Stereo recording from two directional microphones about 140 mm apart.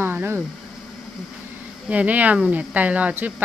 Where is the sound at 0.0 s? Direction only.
15° right (ahead or behind).